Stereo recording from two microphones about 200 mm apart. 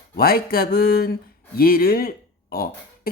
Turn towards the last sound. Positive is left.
turn(degrees=50)  # may be behind; listen again after turning